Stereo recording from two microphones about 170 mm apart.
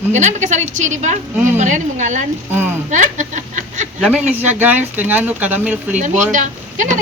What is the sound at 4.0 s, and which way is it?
Speech, 5° right (ahead or behind).